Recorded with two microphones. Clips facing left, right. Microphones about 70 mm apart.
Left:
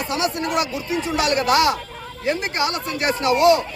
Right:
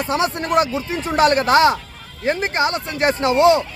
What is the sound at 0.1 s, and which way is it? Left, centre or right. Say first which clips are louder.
Speech: right 4 dB; right.